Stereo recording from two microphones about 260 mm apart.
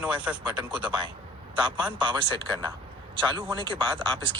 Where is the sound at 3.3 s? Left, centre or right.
Centre.